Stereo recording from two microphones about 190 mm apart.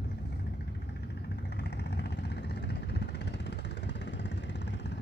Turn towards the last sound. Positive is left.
turn(degrees=65)  # may be behind; listen again after turning